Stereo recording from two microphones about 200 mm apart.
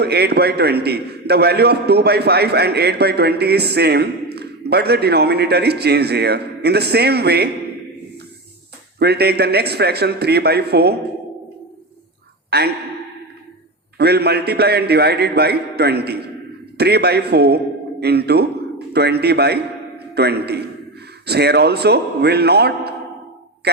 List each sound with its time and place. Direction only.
0.0 s a man's voice: 55° right (ahead or behind)
9.0 s a man's voice: 55° right (ahead or behind)
12.5 s a man's voice: 55° right (ahead or behind)
14.0 s a man's voice: 55° right (ahead or behind)